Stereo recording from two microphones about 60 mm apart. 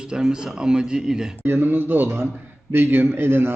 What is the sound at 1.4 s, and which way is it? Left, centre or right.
A man's voice, right.